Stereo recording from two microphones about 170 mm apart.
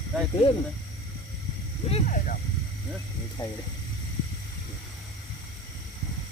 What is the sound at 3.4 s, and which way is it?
Speech, 20° left (ahead or behind).